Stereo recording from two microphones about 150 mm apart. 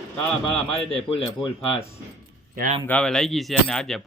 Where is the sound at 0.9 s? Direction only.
40° left (ahead or behind).